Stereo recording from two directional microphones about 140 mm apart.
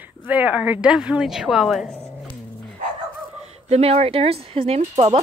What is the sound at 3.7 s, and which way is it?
Speech, 50° right (ahead or behind).